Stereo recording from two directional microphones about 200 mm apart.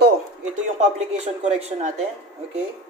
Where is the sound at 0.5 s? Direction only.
35° right (ahead or behind).